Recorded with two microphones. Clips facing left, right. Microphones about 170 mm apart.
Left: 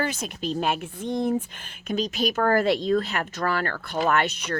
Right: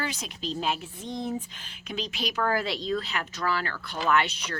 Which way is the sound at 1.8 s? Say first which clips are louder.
Left 8 dB; 45° left (ahead or behind).